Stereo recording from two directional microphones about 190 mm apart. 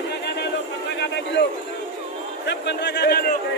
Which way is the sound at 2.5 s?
60° left (ahead or behind).